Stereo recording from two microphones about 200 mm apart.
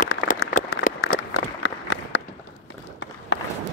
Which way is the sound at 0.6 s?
40° left (ahead or behind).